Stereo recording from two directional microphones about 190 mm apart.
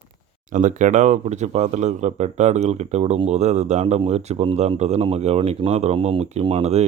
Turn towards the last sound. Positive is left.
turn(degrees=-35)  # may be behind; listen again after turning